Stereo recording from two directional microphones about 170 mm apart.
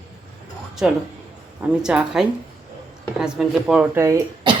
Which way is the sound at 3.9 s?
15° right (ahead or behind).